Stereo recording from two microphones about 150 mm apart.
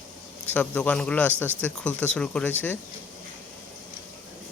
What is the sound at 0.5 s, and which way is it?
A man's voice, 10° left (ahead or behind).